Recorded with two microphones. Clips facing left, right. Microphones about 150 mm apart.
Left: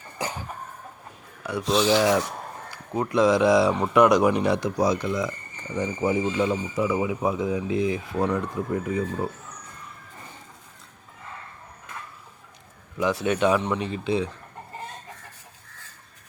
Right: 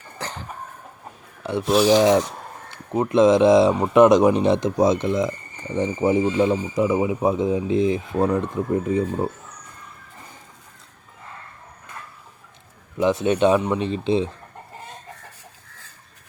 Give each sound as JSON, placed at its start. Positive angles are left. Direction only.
{"t": 0.2, "sound": "cough", "side_deg": 10}
{"t": 1.6, "sound": "speech", "side_deg": -5}
{"t": 1.9, "sound": "speech", "side_deg": -20}
{"t": 13.0, "sound": "speech", "side_deg": -25}